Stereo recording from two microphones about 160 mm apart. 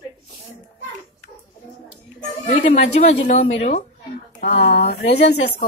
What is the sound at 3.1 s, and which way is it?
Speech, 40° left (ahead or behind).